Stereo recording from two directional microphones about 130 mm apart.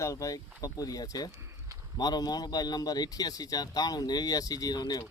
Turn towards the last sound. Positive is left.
turn(degrees=30)  # may be behind; listen again after turning